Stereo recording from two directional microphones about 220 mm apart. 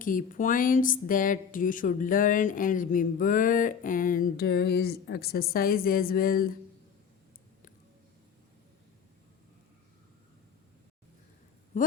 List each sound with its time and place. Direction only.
0.0 s speech: 35° left (ahead or behind)